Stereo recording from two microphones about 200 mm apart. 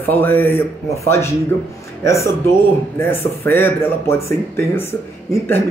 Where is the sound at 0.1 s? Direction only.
10° left (ahead or behind).